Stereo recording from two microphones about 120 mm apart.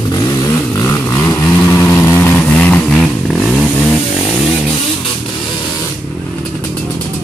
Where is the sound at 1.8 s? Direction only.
20° left (ahead or behind).